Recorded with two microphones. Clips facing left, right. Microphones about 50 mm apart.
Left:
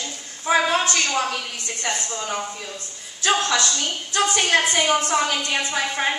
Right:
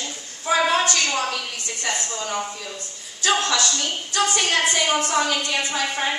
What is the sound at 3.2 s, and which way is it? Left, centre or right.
A woman's voice, left.